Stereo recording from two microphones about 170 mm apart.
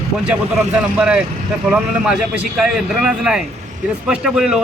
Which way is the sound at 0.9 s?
5° right (ahead or behind).